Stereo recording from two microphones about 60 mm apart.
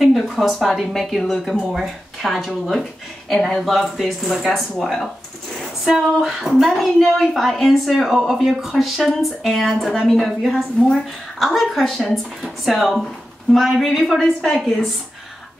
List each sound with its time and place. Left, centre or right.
0.0 s speech: centre